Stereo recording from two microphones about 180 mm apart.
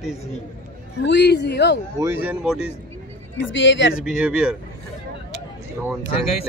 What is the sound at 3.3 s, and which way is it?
Speech, 90° left.